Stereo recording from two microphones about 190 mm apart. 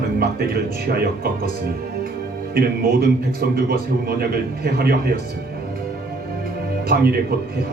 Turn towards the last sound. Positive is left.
turn(degrees=-50)  # may be behind; listen again after turning